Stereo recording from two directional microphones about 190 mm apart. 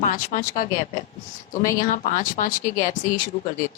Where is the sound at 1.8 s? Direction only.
45° left (ahead or behind).